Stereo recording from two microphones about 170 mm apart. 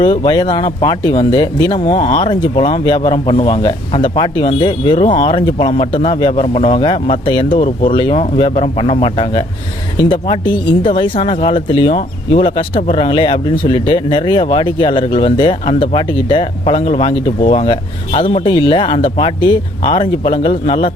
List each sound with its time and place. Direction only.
0.0 s speech: 30° left (ahead or behind)